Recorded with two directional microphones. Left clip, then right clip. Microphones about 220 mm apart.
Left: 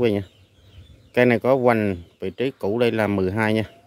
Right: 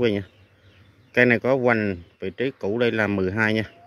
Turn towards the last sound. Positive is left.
turn(degrees=5)  # may be behind; listen again after turning